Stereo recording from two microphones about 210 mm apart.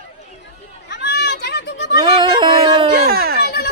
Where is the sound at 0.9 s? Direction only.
50° left (ahead or behind).